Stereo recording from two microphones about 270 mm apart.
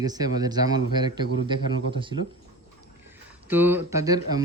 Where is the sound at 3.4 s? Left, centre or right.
Centre.